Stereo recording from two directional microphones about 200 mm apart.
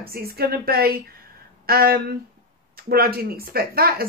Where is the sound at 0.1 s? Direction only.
50° right (ahead or behind).